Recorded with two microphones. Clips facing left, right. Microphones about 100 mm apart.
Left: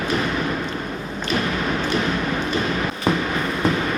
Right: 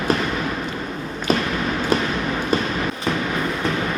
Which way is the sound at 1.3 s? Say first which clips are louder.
Right 2 dB; 40° right (ahead or behind).